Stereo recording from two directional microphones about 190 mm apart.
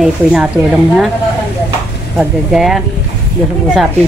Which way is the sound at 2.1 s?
Centre (ahead or behind).